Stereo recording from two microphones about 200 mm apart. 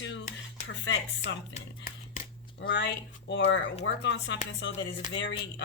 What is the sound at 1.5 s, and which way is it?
Whispering, 40° left (ahead or behind).